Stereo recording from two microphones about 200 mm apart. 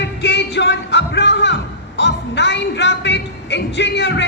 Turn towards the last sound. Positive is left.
turn(degrees=60)  # may be behind; listen again after turning